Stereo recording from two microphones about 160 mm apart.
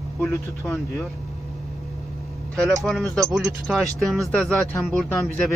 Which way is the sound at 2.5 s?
Centre (ahead or behind).